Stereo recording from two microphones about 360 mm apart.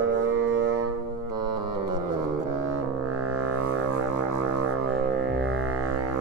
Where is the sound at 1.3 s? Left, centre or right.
Right.